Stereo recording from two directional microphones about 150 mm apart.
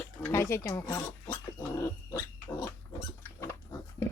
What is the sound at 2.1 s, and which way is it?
Pig, 25° left (ahead or behind).